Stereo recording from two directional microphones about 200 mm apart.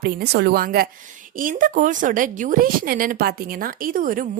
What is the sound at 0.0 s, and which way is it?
A woman's voice, 50° right (ahead or behind).